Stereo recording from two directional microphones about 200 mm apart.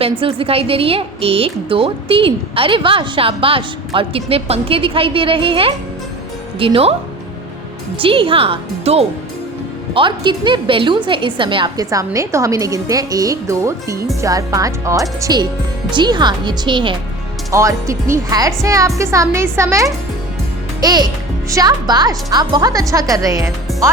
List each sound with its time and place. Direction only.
0.0 s a woman's voice: 25° right (ahead or behind)
7.9 s a woman's voice: 25° right (ahead or behind)